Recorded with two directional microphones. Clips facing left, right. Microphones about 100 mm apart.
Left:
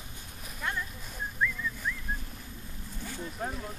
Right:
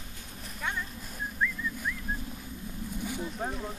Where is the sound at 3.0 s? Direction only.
15° right (ahead or behind).